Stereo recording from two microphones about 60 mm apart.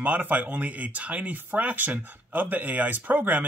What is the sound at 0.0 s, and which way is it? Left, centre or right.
Speech, right.